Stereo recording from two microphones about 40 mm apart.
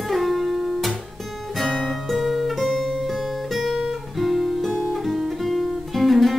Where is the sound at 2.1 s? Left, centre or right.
Centre.